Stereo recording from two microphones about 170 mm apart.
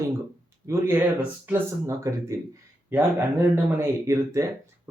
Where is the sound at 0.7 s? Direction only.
15° right (ahead or behind).